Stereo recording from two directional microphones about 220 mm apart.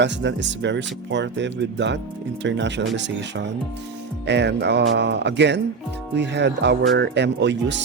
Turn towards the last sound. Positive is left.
turn(degrees=-55)  # may be behind; listen again after turning